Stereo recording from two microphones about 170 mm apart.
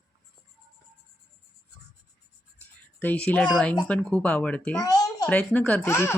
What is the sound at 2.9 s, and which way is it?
Speech, 10° left (ahead or behind).